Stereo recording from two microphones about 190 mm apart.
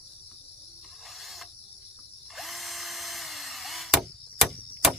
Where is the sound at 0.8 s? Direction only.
Centre (ahead or behind).